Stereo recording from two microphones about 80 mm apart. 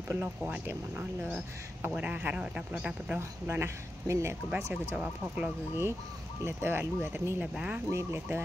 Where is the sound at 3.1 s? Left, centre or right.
Right.